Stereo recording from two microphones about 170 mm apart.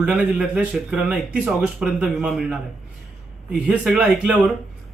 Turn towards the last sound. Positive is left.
turn(degrees=-5)  # may be behind; listen again after turning